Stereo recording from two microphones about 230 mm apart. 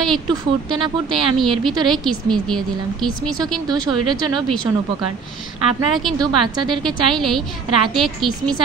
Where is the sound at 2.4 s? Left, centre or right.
Centre.